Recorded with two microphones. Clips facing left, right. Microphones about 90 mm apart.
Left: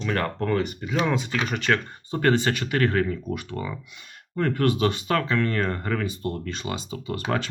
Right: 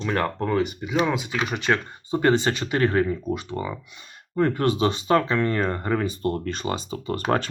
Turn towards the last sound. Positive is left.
turn(degrees=-40)  # may be behind; listen again after turning